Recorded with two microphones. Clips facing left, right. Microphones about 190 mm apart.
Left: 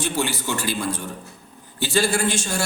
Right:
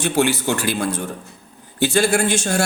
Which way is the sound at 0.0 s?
65° right (ahead or behind).